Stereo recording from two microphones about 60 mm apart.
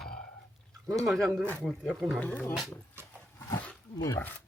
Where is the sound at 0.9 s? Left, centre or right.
Centre.